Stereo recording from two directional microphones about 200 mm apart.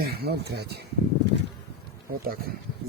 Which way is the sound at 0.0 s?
50° right (ahead or behind).